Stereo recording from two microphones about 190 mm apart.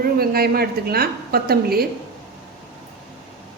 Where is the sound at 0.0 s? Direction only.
55° right (ahead or behind).